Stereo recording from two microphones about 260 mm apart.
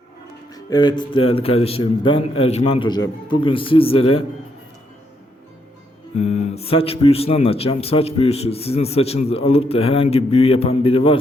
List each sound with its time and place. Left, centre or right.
0.5 s speech: centre
6.1 s speech: left